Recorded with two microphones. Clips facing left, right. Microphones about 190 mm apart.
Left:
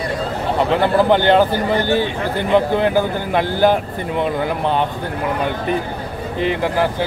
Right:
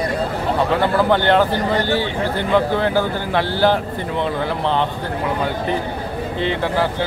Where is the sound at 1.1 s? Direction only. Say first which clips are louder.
Left 2 dB; 15° left (ahead or behind).